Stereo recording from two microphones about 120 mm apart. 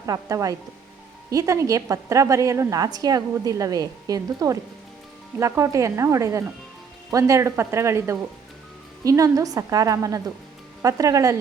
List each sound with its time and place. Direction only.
0.0 s a woman's voice: 25° right (ahead or behind)